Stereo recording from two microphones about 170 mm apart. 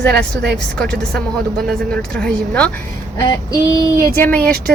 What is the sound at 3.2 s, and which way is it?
Child singing, 25° left (ahead or behind).